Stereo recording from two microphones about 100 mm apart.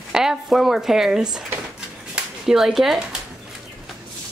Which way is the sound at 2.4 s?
5° right (ahead or behind).